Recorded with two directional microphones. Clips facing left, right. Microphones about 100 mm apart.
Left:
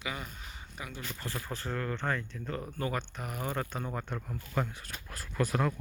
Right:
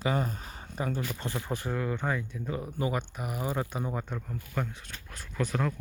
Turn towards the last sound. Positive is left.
turn(degrees=5)  # may be behind; listen again after turning